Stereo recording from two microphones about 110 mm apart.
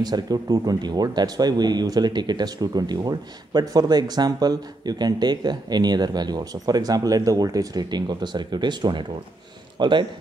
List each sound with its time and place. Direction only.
0.0 s a man's voice: 35° right (ahead or behind)